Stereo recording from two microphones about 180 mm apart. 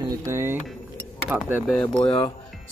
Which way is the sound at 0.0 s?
15° right (ahead or behind).